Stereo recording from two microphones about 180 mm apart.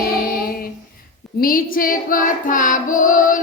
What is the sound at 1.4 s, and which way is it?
Child singing, 50° left (ahead or behind).